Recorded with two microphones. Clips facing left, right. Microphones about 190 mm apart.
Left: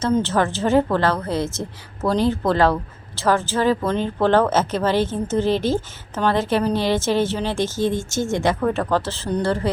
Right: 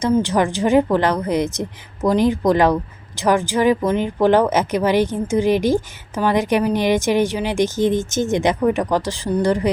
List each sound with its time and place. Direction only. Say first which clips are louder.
0.0 s speech: right 2 dB; 15° right (ahead or behind)